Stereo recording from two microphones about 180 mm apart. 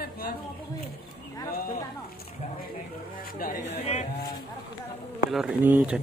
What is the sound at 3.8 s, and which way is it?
Speech, 35° left (ahead or behind).